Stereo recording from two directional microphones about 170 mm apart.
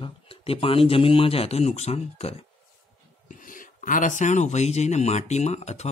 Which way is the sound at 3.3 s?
50° left (ahead or behind).